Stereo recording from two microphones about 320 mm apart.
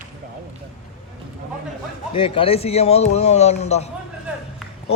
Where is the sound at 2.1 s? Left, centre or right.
Centre.